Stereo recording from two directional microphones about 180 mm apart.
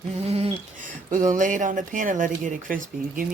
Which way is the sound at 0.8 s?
45° right (ahead or behind).